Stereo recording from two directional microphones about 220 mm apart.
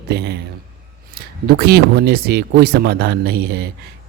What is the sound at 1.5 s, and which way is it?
Speech, 45° right (ahead or behind).